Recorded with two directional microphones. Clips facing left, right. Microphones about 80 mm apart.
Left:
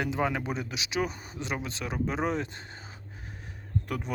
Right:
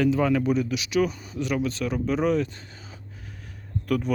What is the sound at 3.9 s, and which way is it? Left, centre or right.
Speech, left.